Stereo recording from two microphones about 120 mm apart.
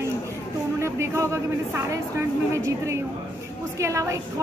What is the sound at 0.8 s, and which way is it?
Music, 25° right (ahead or behind).